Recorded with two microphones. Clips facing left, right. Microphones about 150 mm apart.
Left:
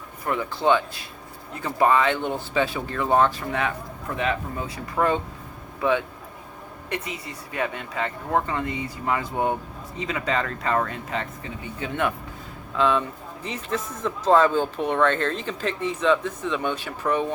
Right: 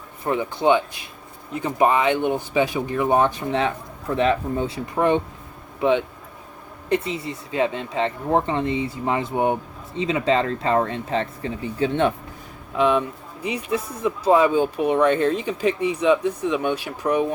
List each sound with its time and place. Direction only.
0.3 s speech: 20° right (ahead or behind)
6.9 s speech: 30° right (ahead or behind)
12.7 s speech: 15° right (ahead or behind)